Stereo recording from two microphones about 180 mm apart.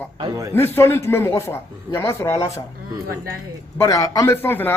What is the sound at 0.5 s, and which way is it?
Speech, 15° left (ahead or behind).